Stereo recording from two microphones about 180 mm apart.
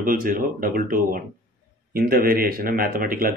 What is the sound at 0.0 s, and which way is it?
Speech, 50° right (ahead or behind).